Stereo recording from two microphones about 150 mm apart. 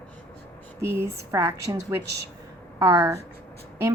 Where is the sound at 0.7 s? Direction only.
20° right (ahead or behind).